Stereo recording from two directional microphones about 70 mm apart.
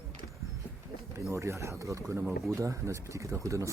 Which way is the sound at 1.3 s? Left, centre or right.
Right.